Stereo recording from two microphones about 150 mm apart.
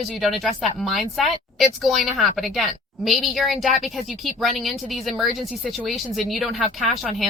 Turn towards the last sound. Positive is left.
turn(degrees=0)  # may be behind; listen again after turning